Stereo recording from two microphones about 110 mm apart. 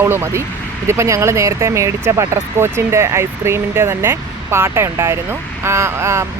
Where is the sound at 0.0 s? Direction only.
20° right (ahead or behind).